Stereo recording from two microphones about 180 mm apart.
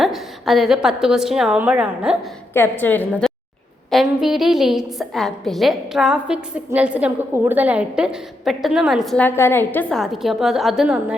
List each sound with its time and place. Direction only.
0.0 s a woman's voice: centre (ahead or behind)
2.5 s a woman's voice: 10° left (ahead or behind)